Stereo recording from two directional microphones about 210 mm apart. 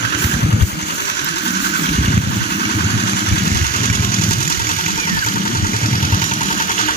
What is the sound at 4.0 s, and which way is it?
Engine, 45° left (ahead or behind).